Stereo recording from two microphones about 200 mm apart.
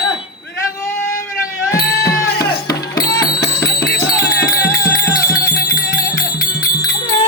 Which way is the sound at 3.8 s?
55° left (ahead or behind).